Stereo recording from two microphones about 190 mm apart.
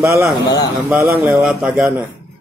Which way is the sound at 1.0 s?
15° right (ahead or behind).